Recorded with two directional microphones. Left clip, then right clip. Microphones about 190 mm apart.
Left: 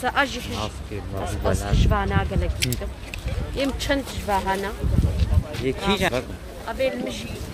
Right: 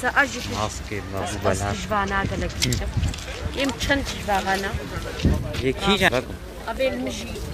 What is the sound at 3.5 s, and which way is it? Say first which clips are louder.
Speech: right 1 dB; 65° left (ahead or behind).